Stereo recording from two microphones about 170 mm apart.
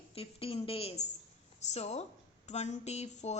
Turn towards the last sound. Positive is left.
turn(degrees=40)  # may be behind; listen again after turning